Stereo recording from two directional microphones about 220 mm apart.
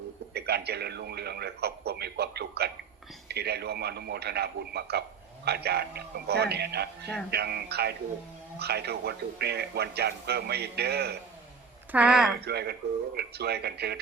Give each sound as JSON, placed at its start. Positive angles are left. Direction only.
{"t": 0.3, "sound": "radio", "side_deg": -45}
{"t": 3.2, "sound": "speech", "side_deg": -45}
{"t": 11.9, "sound": "speech", "side_deg": -5}
{"t": 12.5, "sound": "speech", "side_deg": -45}